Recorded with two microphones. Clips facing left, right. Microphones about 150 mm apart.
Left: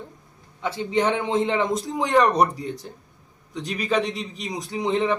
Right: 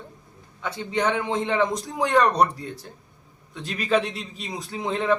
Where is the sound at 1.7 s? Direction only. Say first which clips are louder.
Left 1 dB; centre (ahead or behind).